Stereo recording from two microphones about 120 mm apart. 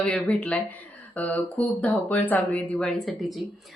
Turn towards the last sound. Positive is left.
turn(degrees=0)  # may be behind; listen again after turning